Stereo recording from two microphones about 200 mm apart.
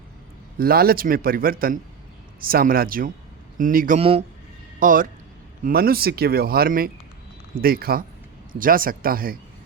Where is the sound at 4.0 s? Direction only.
30° right (ahead or behind).